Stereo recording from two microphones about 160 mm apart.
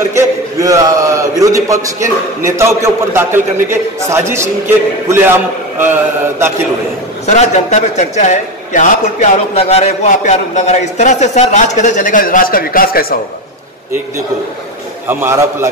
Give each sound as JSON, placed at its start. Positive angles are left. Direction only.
{"t": 0.1, "sound": "a man's voice", "side_deg": -20}
{"t": 7.2, "sound": "a man's voice", "side_deg": 45}
{"t": 15.0, "sound": "a man's voice", "side_deg": -15}